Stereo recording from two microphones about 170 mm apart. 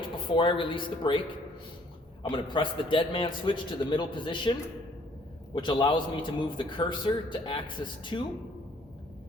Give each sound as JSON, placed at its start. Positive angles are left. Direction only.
{"t": 0.0, "sound": "speech", "side_deg": 30}
{"t": 2.3, "sound": "a man's voice", "side_deg": 30}
{"t": 5.5, "sound": "a man's voice", "side_deg": 25}